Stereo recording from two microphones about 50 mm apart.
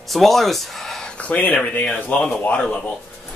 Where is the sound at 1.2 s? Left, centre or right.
Left.